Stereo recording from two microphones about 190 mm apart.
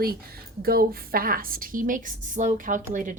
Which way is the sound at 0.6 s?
50° right (ahead or behind).